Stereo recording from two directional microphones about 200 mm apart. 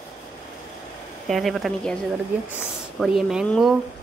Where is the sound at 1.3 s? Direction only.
Centre (ahead or behind).